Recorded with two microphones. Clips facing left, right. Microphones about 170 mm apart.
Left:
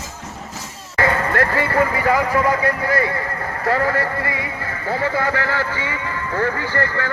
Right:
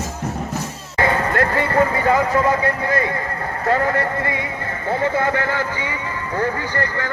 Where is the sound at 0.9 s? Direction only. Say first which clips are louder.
Even; 20° right (ahead or behind).